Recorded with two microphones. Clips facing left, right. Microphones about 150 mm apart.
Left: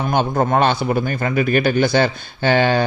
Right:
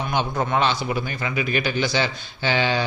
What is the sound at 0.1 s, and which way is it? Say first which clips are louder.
Speech: left 6 dB; 50° left (ahead or behind).